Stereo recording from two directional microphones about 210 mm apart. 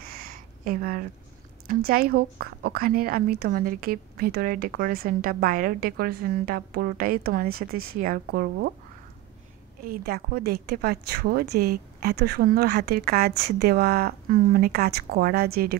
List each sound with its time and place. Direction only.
0.0 s a sound: 45° right (ahead or behind)
1.7 s a woman's voice: 45° right (ahead or behind)
9.8 s a woman's voice: 45° right (ahead or behind)